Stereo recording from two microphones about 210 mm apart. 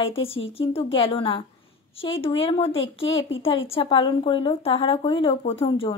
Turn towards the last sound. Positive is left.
turn(degrees=25)  # may be behind; listen again after turning